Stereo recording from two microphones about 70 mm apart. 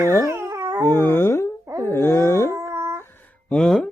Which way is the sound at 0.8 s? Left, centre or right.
Left.